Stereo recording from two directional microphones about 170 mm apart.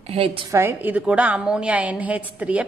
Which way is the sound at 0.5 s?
15° right (ahead or behind).